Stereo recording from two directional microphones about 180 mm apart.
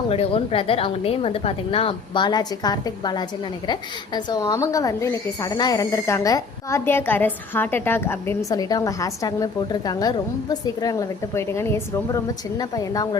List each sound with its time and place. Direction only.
0.1 s a woman's voice: 30° left (ahead or behind)